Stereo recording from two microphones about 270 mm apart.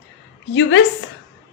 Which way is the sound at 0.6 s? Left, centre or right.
Left.